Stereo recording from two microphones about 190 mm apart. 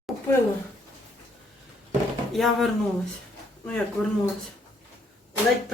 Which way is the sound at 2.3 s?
Centre (ahead or behind).